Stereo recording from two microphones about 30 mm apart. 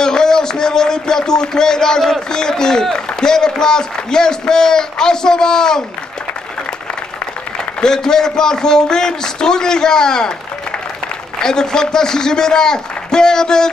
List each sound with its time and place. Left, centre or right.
0.0 s a man's voice: left
7.8 s a man's voice: left
11.4 s a man's voice: left